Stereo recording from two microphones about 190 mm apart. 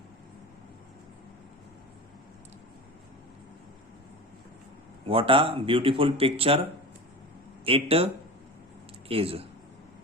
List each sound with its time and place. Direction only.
5.0 s speech: 30° right (ahead or behind)